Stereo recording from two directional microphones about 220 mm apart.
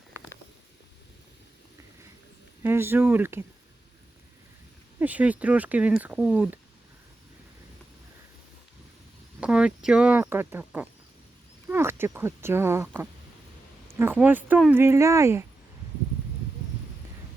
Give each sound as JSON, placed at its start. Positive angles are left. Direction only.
{"t": 2.6, "sound": "speech", "side_deg": -10}
{"t": 4.9, "sound": "speech", "side_deg": -5}
{"t": 9.4, "sound": "speech", "side_deg": -5}